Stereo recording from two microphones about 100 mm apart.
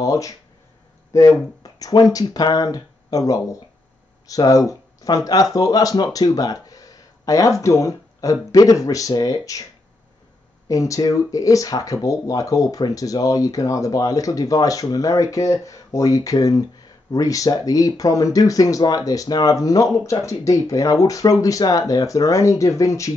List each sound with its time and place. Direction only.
0.0 s speech: 35° left (ahead or behind)
10.7 s speech: 35° left (ahead or behind)